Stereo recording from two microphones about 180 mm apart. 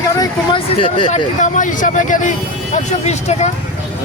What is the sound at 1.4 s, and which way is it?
Speech, 45° left (ahead or behind).